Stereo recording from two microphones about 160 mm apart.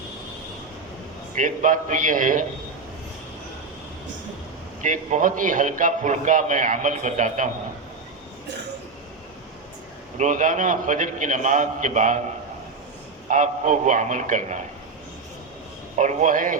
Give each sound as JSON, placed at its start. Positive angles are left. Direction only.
{"t": 1.4, "sound": "a man's voice", "side_deg": -55}
{"t": 4.8, "sound": "a man's voice", "side_deg": -55}
{"t": 10.2, "sound": "a man's voice", "side_deg": -50}
{"t": 13.2, "sound": "a man's voice", "side_deg": -50}
{"t": 16.0, "sound": "a man's voice", "side_deg": -50}